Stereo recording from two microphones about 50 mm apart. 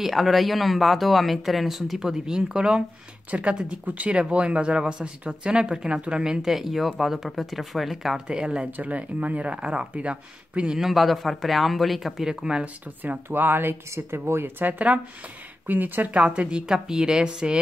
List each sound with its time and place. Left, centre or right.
0.0 s a woman's voice: centre
6.4 s speech: centre
8.3 s a woman's voice: centre
8.7 s speech: right
10.8 s speech: centre
12.6 s speech: right
13.8 s speech: right
14.6 s speech: right
16.2 s a woman's voice: right